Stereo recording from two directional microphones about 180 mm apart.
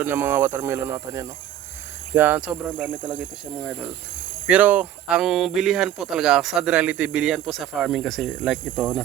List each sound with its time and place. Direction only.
0.0 s speech: 10° right (ahead or behind)